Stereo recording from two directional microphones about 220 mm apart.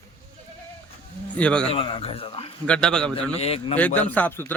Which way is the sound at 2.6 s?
5° left (ahead or behind).